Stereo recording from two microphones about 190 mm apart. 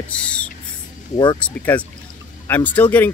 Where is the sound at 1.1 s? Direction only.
25° left (ahead or behind).